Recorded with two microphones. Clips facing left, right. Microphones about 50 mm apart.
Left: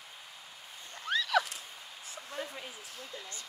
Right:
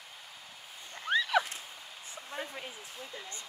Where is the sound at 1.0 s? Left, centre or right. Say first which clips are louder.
Right 1 dB; centre.